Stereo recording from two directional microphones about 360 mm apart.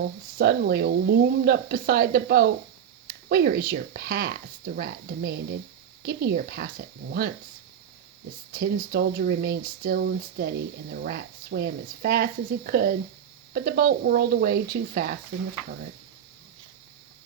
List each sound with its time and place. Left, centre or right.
0.0 s speech: right
8.5 s speech: right